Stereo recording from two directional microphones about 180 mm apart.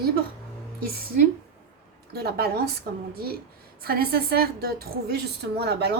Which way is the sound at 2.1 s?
60° right (ahead or behind).